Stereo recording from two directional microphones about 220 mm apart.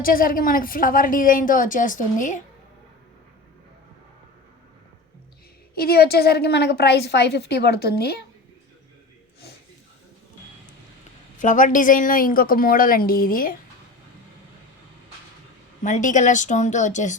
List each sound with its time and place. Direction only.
0.0 s a woman's voice: 40° left (ahead or behind)
5.7 s a woman's voice: 45° left (ahead or behind)
11.3 s a woman's voice: 35° left (ahead or behind)
15.8 s a woman's voice: 35° left (ahead or behind)